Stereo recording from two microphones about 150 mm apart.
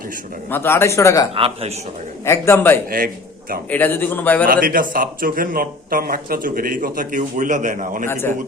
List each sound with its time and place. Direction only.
0.5 s speech: 15° left (ahead or behind)
1.4 s a man's voice: 40° right (ahead or behind)
2.2 s a man's voice: 20° left (ahead or behind)
4.4 s a man's voice: 70° right (ahead or behind)
8.0 s a man's voice: 15° left (ahead or behind)